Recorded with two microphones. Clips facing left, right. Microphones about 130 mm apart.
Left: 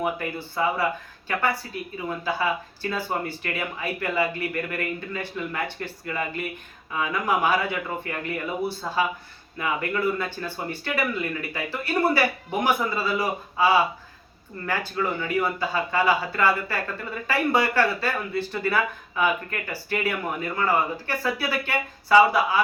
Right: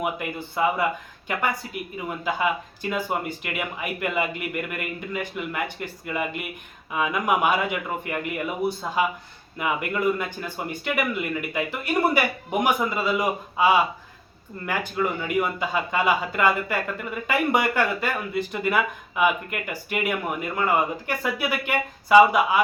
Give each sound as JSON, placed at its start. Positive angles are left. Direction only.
{"t": 0.0, "sound": "speech", "side_deg": -15}
{"t": 15.4, "sound": "speech", "side_deg": -15}